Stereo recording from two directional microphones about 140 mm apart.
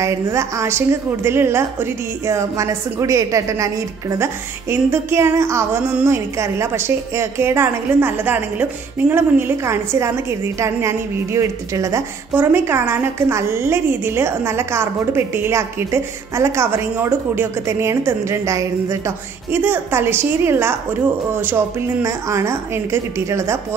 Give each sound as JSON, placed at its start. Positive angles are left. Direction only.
{"t": 0.0, "sound": "a woman's voice", "side_deg": -20}